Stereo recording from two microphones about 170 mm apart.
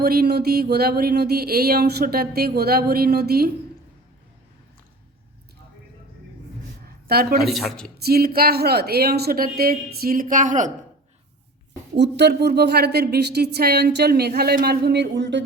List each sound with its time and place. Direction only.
0.0 s speech: 65° right (ahead or behind)
7.1 s speech: 65° right (ahead or behind)
7.4 s speech: centre (ahead or behind)
7.9 s speech: 65° right (ahead or behind); by 10.7 s 50° right (ahead or behind)
11.9 s a woman's voice: 90° right